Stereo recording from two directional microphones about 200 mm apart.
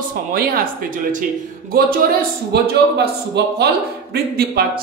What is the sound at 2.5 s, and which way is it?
Speech, 55° right (ahead or behind).